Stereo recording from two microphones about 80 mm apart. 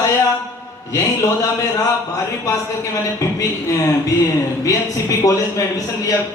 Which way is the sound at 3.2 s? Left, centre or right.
Left.